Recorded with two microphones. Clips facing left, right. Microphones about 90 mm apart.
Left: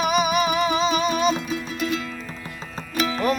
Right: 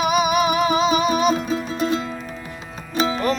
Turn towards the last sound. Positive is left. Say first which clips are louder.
# right 3 dB
turn(degrees=-25)  # may be behind; listen again after turning